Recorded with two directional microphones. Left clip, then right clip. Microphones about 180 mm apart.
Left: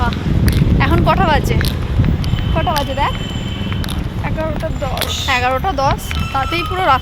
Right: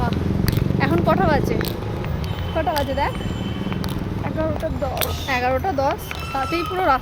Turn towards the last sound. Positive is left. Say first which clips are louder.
# left 5 dB
turn(degrees=0)  # may be behind; listen again after turning